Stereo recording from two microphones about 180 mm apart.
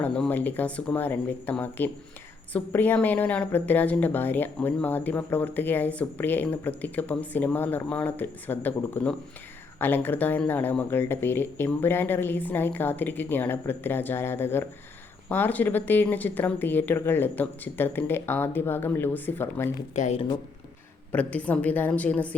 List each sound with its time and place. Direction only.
0.0 s speech: 5° left (ahead or behind)
20.0 s speech: 35° left (ahead or behind)
21.1 s speech: 10° left (ahead or behind)